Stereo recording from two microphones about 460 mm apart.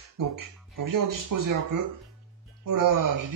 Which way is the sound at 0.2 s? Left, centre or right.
Right.